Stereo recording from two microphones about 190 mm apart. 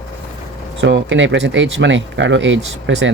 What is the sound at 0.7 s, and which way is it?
Speech, 70° right (ahead or behind).